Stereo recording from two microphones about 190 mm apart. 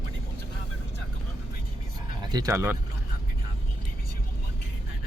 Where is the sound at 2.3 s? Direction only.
20° right (ahead or behind).